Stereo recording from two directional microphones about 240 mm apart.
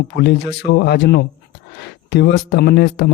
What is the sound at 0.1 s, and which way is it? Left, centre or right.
Speech, left.